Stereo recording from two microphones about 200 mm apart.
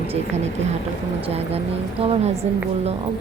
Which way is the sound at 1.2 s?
30° right (ahead or behind).